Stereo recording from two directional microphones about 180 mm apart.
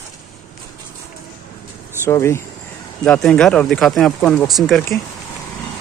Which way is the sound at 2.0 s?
15° left (ahead or behind).